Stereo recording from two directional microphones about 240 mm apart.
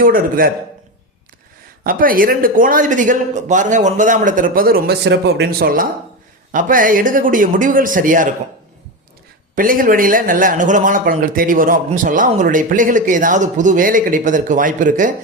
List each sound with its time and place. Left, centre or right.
0.0 s a man's voice: right
1.8 s a man's voice: right
9.6 s a man's voice: right